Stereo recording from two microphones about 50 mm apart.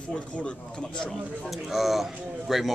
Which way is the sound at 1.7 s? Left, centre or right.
Centre.